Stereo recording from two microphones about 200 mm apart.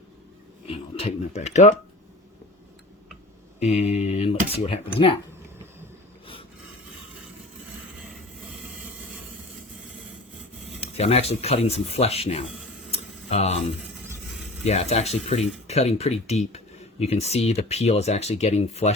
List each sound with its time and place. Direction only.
0.7 s speech: 30° left (ahead or behind)
3.6 s speech: 35° left (ahead or behind)
10.8 s speech: 30° left (ahead or behind)
12.9 s tick: 30° left (ahead or behind)
14.3 s mechanisms: centre (ahead or behind)
14.6 s speech: 30° left (ahead or behind)